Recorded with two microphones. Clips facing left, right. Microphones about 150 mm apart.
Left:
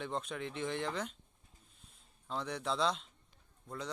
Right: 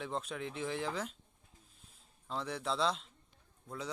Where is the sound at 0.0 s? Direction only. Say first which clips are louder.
Even; centre (ahead or behind).